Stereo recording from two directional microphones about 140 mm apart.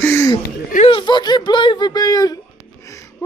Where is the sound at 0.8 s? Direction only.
35° left (ahead or behind).